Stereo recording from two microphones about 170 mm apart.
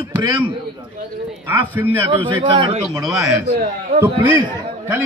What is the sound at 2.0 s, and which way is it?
Speech, 30° right (ahead or behind).